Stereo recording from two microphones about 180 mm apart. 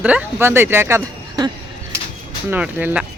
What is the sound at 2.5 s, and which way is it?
Speech, 10° right (ahead or behind).